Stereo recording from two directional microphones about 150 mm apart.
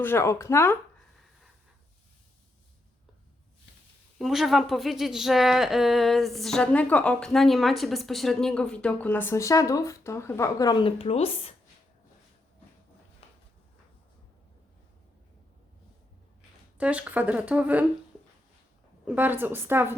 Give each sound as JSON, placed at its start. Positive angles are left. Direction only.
{"t": 0.0, "sound": "speech", "side_deg": 15}
{"t": 4.2, "sound": "speech", "side_deg": 0}
{"t": 16.7, "sound": "speech", "side_deg": -10}
{"t": 19.0, "sound": "speech", "side_deg": -10}